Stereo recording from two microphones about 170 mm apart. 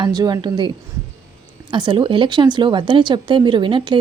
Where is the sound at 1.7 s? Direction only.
25° right (ahead or behind).